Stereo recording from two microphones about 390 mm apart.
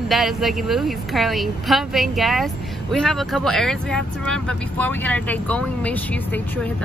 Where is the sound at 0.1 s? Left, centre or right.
Centre.